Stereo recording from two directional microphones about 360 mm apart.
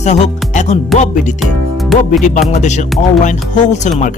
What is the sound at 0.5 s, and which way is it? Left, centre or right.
Music, centre.